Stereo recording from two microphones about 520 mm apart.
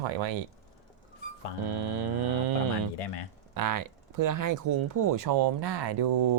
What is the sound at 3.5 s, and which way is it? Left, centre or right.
Speech, right.